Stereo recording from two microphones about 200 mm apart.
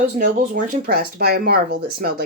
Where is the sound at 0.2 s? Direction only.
45° right (ahead or behind).